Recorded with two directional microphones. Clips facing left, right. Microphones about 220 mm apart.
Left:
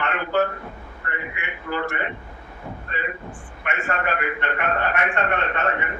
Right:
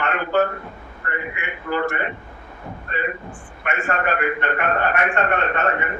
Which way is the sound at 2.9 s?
45° right (ahead or behind).